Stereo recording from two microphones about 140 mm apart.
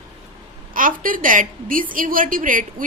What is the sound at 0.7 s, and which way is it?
A woman's voice, 80° right.